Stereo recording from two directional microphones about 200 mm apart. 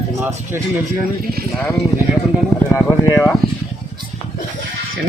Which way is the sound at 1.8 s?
55° right (ahead or behind).